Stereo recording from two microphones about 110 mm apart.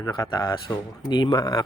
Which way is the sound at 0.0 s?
35° left (ahead or behind).